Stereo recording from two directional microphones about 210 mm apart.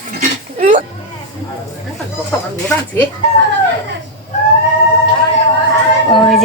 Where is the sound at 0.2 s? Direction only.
35° right (ahead or behind).